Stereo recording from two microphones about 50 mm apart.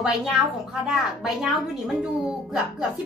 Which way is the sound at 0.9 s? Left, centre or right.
Centre.